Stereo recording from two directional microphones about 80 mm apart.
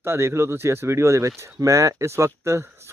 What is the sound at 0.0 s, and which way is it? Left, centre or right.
Speech, right.